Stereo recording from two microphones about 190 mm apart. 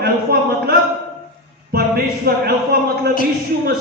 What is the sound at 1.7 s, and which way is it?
A man's voice, 55° right (ahead or behind).